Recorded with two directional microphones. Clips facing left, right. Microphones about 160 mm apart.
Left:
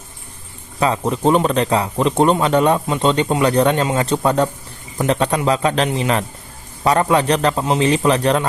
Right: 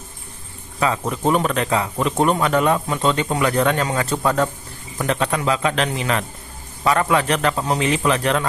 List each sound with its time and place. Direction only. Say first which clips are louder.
0.8 s speech: left 3 dB; 30° left (ahead or behind)